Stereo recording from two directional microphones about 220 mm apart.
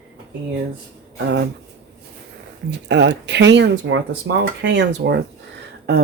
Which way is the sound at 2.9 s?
50° right (ahead or behind).